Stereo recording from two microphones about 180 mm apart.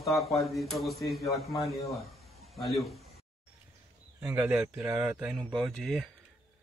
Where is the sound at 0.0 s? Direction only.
Centre (ahead or behind).